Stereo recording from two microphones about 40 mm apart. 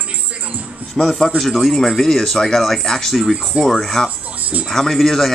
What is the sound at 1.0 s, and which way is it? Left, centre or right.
A man's voice, centre.